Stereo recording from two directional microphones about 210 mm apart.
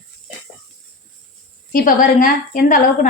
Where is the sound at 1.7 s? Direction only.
40° left (ahead or behind).